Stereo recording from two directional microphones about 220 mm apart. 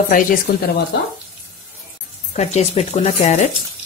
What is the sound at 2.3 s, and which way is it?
Speech, 30° left (ahead or behind).